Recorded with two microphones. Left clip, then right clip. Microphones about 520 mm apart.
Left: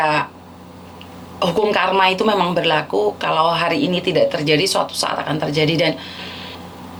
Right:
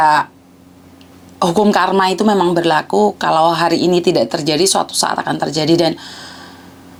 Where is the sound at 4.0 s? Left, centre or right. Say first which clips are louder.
Right 2 dB; right.